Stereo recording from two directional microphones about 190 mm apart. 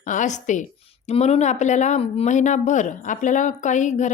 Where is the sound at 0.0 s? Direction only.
40° left (ahead or behind).